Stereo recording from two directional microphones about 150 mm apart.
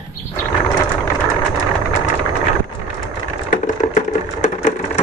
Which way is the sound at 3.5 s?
50° left (ahead or behind).